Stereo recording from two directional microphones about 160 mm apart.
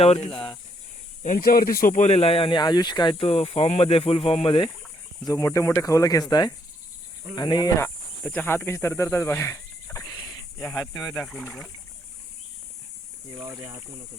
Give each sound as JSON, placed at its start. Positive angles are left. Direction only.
{"t": 0.0, "sound": "speech", "side_deg": 40}
{"t": 1.4, "sound": "speech", "side_deg": 70}
{"t": 5.2, "sound": "speech", "side_deg": 20}
{"t": 7.3, "sound": "speech", "side_deg": 25}
{"t": 8.2, "sound": "speech", "side_deg": 10}
{"t": 10.1, "sound": "a sound", "side_deg": 0}
{"t": 10.6, "sound": "speech", "side_deg": 15}
{"t": 11.0, "sound": "speech", "side_deg": 5}